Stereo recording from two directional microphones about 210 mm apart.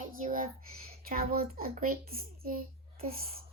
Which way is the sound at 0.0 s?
40° right (ahead or behind).